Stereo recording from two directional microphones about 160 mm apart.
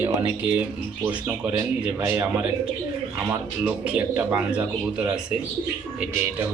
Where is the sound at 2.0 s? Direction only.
15° right (ahead or behind).